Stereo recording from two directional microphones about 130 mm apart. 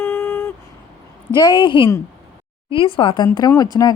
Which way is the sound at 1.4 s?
35° left (ahead or behind).